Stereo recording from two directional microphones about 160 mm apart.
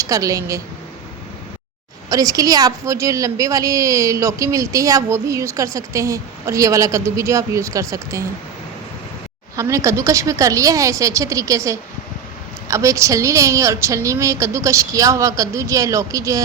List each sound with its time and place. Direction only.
0.0 s a woman's voice: 20° right (ahead or behind)
2.0 s a woman's voice: 20° right (ahead or behind)
9.6 s a woman's voice: 20° right (ahead or behind)